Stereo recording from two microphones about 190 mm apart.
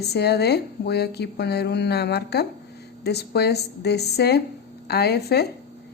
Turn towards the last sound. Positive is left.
turn(degrees=55)  # may be behind; listen again after turning